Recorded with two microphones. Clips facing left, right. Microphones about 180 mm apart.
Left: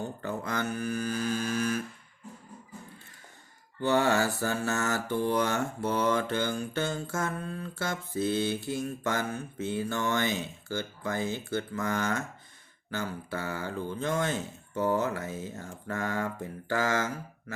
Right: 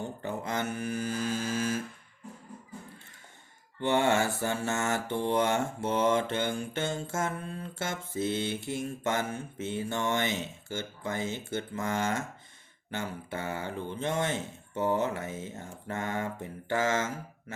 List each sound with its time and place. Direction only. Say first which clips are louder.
0.0 s mantra: left 1 dB; 25° right (ahead or behind)
3.8 s mantra: left 1 dB; 25° right (ahead or behind)